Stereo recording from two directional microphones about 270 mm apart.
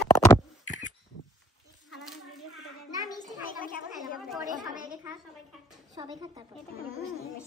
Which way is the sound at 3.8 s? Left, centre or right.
Centre.